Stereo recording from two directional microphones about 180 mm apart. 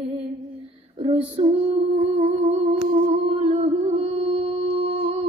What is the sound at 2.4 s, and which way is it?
Humming, 35° right (ahead or behind).